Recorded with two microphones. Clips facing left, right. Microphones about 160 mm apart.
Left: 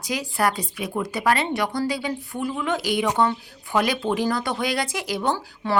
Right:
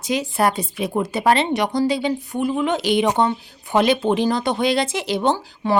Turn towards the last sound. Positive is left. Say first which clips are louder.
# right 5 dB
turn(degrees=-20)  # may be behind; listen again after turning